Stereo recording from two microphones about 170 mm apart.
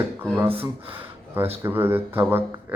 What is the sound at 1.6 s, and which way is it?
Speech, 15° right (ahead or behind).